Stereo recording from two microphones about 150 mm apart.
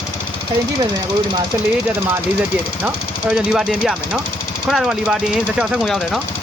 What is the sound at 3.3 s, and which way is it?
Speech, 5° right (ahead or behind).